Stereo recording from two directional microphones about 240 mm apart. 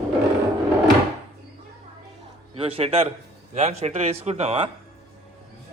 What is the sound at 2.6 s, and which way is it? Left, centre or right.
A man's voice, right.